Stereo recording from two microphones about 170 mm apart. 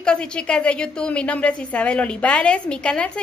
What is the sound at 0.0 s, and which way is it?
A child's voice, 5° left (ahead or behind).